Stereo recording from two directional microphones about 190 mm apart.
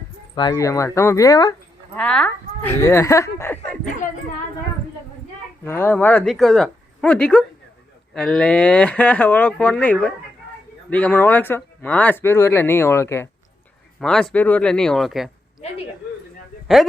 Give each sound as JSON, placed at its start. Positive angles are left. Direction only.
{"t": 0.3, "sound": "speech", "side_deg": 20}
{"t": 2.0, "sound": "speech", "side_deg": 5}
{"t": 5.6, "sound": "speech", "side_deg": 10}
{"t": 14.0, "sound": "speech", "side_deg": 5}